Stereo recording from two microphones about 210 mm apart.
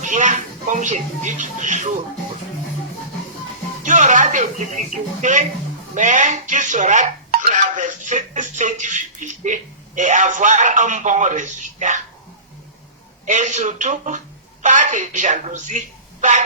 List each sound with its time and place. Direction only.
0.0 s speech: 35° right (ahead or behind)
3.8 s speech: 35° right (ahead or behind)
13.2 s speech: 35° right (ahead or behind)